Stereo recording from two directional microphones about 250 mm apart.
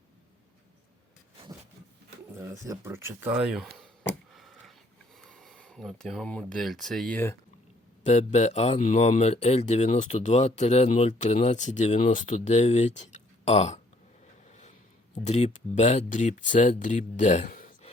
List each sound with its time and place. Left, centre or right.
2.3 s speech: centre
4.4 s a sound: centre
5.2 s speech: centre
8.0 s speech: left
15.1 s speech: left